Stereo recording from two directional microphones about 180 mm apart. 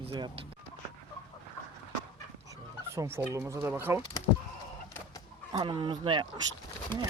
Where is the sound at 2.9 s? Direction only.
15° right (ahead or behind).